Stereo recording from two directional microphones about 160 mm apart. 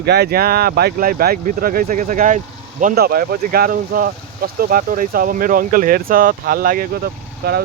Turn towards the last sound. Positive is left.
turn(degrees=-90)